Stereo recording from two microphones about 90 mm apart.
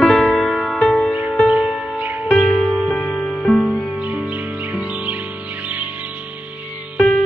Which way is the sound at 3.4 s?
5° left (ahead or behind).